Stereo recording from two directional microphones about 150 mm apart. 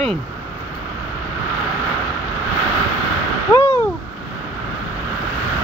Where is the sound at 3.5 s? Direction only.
20° left (ahead or behind).